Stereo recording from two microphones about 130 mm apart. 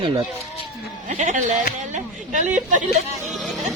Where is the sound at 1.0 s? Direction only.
70° right (ahead or behind).